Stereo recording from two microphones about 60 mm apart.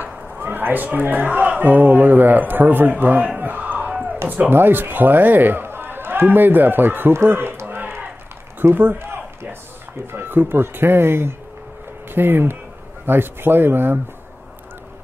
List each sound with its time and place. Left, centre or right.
0.4 s a man's voice: right
8.5 s a sound: right
10.1 s speech: right